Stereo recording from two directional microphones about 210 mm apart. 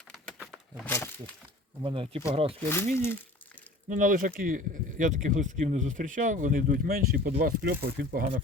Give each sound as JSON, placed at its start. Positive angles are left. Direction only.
{"t": 0.9, "sound": "speech", "side_deg": 10}
{"t": 1.8, "sound": "speech", "side_deg": -25}
{"t": 2.6, "sound": "speech", "side_deg": 10}
{"t": 3.8, "sound": "speech", "side_deg": -40}